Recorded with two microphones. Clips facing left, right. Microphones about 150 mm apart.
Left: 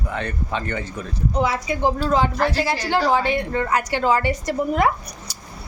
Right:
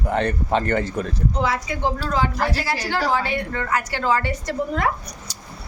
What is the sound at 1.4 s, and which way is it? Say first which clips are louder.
A woman's voice: left 3 dB; 15° left (ahead or behind).